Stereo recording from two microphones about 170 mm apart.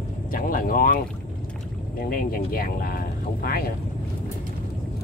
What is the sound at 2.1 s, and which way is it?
Speech, 60° left (ahead or behind).